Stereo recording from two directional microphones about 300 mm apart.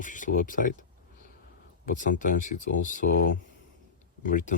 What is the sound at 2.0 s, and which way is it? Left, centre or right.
Speech, left.